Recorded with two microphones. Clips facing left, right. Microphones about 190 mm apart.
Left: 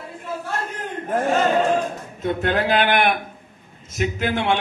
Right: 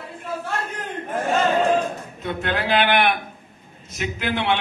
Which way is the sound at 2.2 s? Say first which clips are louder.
Left 4 dB; 45° left (ahead or behind).